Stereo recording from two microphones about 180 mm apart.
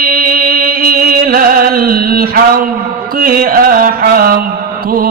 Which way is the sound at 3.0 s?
55° right (ahead or behind).